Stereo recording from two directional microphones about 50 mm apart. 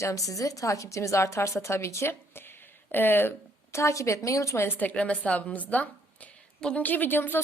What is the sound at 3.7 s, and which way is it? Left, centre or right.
Speech, left.